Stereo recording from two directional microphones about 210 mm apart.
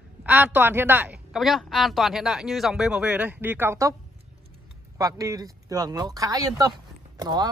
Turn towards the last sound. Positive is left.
turn(degrees=-20)  # may be behind; listen again after turning